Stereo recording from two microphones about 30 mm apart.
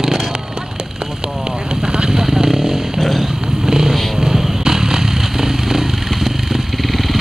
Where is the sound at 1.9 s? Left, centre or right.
Right.